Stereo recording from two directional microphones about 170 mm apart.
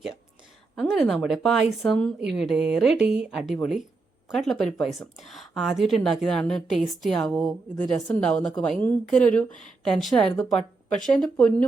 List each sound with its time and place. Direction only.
0.8 s a woman's voice: 5° left (ahead or behind)